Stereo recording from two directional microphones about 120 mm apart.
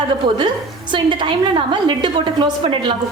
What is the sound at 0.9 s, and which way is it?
A woman's voice, 40° right (ahead or behind).